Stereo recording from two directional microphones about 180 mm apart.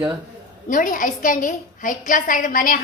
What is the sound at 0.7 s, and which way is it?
A woman's voice, 50° left (ahead or behind).